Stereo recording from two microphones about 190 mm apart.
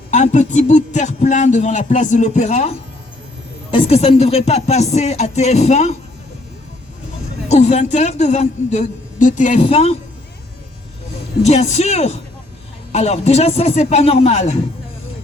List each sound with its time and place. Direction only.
0.1 s speech: 40° left (ahead or behind)
7.4 s speech: 35° left (ahead or behind)
11.4 s speech: 35° left (ahead or behind)